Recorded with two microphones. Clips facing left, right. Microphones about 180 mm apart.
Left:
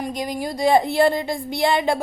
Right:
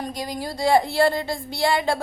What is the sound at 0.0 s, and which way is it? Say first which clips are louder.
A woman's voice: left 3 dB; 20° left (ahead or behind).